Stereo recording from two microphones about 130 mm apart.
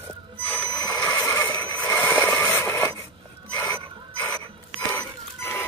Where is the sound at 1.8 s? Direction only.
15° left (ahead or behind).